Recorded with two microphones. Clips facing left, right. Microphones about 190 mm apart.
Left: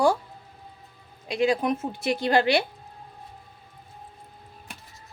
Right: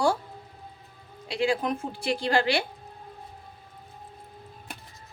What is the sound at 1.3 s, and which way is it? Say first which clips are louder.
A woman's voice: left 3 dB; 20° left (ahead or behind).